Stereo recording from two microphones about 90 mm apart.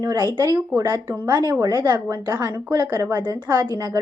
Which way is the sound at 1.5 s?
40° right (ahead or behind).